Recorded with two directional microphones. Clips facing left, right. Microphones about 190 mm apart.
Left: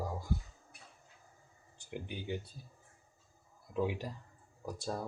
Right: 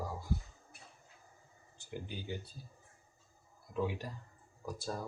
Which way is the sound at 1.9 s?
20° left (ahead or behind).